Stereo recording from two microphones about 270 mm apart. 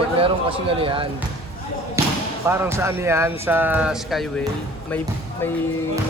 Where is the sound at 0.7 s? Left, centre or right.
Centre.